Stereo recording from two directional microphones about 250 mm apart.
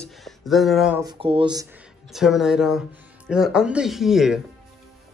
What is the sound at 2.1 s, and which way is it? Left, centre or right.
Speech, centre.